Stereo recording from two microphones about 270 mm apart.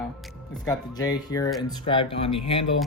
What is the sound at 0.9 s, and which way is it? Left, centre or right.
Speech, centre.